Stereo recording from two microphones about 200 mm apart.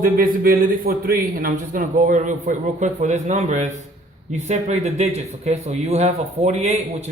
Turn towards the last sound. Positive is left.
turn(degrees=-35)  # may be behind; listen again after turning